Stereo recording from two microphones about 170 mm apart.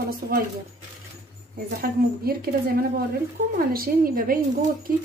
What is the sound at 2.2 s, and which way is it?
Speech, 60° right (ahead or behind).